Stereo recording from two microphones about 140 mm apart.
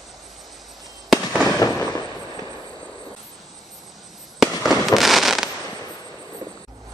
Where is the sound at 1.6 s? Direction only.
25° left (ahead or behind).